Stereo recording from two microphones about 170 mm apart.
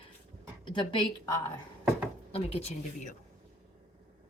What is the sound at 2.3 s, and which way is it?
Speech, 35° left (ahead or behind).